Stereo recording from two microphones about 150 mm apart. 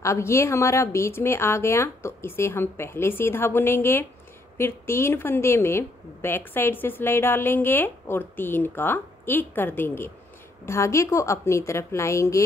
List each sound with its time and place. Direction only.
0.0 s a woman's voice: 20° left (ahead or behind)